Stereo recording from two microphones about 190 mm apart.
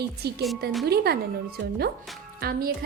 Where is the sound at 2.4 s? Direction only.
50° right (ahead or behind).